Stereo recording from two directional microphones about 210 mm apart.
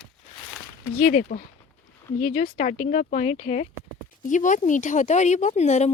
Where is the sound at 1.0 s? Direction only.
40° left (ahead or behind).